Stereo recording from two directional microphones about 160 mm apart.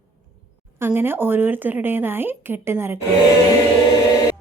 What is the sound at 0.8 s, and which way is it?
Speech, 15° right (ahead or behind).